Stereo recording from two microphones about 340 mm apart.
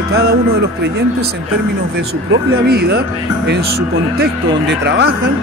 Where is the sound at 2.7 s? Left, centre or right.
Right.